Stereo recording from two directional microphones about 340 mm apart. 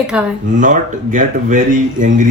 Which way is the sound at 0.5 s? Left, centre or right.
Right.